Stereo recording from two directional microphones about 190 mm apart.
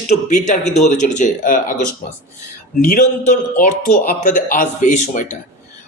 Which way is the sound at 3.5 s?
50° left (ahead or behind).